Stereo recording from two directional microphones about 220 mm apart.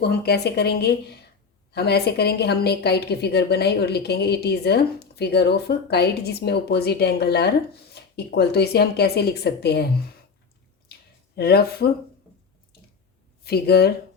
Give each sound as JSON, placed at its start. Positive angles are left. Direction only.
{"t": 0.0, "sound": "a woman's voice", "side_deg": 45}
{"t": 10.9, "sound": "a sound", "side_deg": 45}
{"t": 11.3, "sound": "a woman's voice", "side_deg": 45}
{"t": 13.4, "sound": "a woman's voice", "side_deg": 45}